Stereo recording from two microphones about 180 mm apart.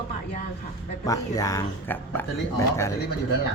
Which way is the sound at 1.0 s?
20° left (ahead or behind).